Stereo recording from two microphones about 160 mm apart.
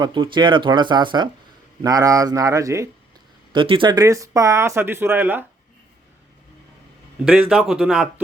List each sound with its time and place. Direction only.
0.0 s speech: 30° right (ahead or behind)
3.5 s speech: 30° right (ahead or behind); by 5.5 s 10° right (ahead or behind)
7.3 s speech: 5° right (ahead or behind)